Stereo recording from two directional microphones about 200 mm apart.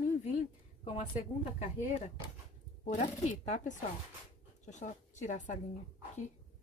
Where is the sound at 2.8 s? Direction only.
40° left (ahead or behind).